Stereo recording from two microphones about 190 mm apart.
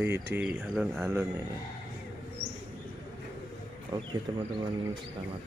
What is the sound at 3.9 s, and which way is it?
Speech, 15° right (ahead or behind).